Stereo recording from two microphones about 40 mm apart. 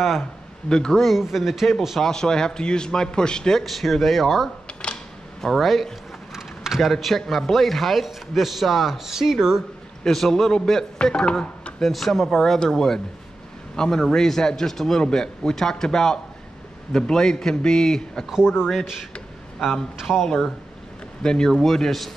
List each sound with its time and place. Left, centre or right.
0.7 s speech: centre
1.0 s a man's voice: centre
2.0 s a man's voice: centre
3.6 s a man's voice: centre
6.3 s a sound: centre
6.9 s a man's voice: centre
10.0 s a man's voice: centre
11.8 s a man's voice: centre
20.0 s speech: centre
20.2 s a man's voice: centre